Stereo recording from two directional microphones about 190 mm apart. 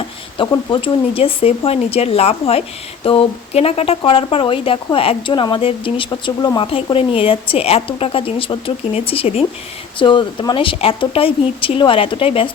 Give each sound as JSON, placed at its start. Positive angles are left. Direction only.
{"t": 0.3, "sound": "speech", "side_deg": 25}